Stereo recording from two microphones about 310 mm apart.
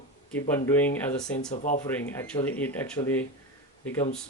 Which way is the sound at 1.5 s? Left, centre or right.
Left.